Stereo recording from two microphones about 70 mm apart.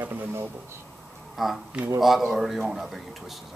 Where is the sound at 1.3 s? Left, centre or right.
Centre.